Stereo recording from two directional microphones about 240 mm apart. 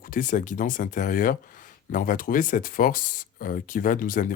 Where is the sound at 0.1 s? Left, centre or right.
Left.